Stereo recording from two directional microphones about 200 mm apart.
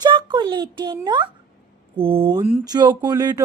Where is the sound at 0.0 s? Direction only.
25° right (ahead or behind).